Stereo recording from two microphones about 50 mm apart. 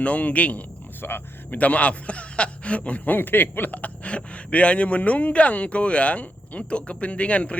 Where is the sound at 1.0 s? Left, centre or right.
Left.